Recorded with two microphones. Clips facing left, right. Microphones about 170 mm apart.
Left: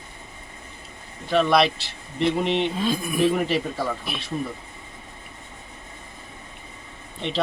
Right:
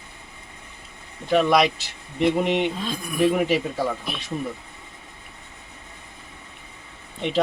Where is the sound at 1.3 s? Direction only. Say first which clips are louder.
Right 1 dB; 10° right (ahead or behind).